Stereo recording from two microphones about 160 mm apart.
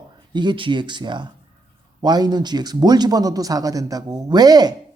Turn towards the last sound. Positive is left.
turn(degrees=-25)  # may be behind; listen again after turning